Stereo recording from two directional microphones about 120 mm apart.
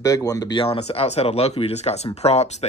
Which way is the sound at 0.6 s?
55° left (ahead or behind).